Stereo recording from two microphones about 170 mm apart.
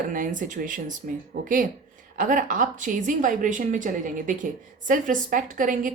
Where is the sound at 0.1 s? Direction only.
50° right (ahead or behind).